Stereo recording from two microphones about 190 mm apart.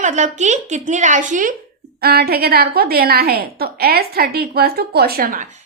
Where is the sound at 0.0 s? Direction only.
40° right (ahead or behind).